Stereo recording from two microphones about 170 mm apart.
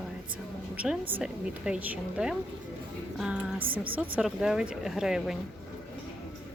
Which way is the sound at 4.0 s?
5° right (ahead or behind).